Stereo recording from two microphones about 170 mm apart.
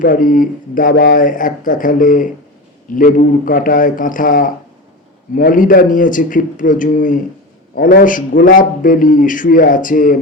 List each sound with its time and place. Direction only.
0.0 s a man's voice: 55° left (ahead or behind)